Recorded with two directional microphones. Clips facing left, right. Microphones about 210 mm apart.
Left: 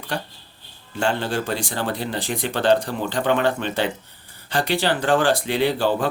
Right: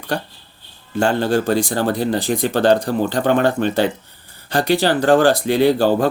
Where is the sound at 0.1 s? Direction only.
40° right (ahead or behind).